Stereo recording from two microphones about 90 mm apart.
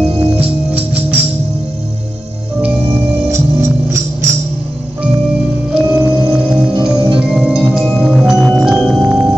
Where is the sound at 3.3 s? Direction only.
30° right (ahead or behind).